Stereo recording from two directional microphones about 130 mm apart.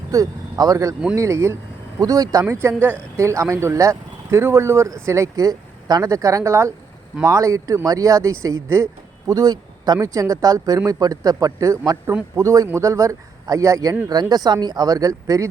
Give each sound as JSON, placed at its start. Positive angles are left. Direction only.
{"t": 0.1, "sound": "speech", "side_deg": -25}